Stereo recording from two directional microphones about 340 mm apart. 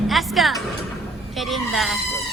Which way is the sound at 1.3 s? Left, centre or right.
Centre.